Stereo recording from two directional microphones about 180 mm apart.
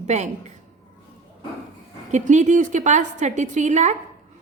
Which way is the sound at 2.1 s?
40° right (ahead or behind).